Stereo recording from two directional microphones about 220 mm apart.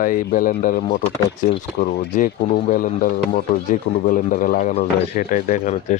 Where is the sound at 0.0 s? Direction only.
40° left (ahead or behind).